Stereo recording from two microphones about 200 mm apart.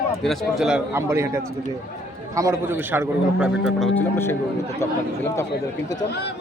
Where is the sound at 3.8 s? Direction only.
10° left (ahead or behind).